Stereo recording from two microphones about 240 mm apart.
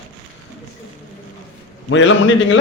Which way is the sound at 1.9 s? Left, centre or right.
Left.